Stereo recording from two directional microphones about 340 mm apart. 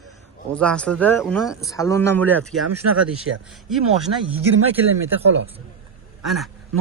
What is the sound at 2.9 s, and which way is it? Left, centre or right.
Speech, right.